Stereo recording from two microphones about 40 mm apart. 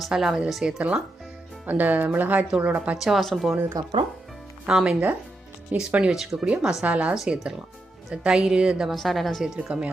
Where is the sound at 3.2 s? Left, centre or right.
Centre.